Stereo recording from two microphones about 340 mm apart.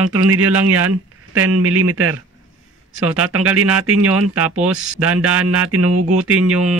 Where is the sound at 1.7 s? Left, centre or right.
Right.